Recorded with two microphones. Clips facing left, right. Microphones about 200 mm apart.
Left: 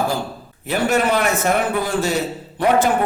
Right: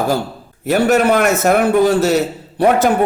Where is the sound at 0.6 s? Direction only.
45° right (ahead or behind).